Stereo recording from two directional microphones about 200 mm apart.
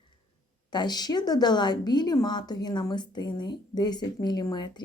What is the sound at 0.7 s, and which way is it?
A woman's voice, 20° left (ahead or behind).